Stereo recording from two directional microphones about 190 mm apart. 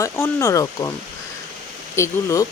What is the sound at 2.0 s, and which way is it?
Speech, 15° left (ahead or behind).